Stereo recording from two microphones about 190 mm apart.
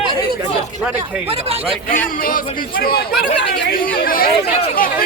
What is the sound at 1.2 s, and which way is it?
Speech, 30° right (ahead or behind).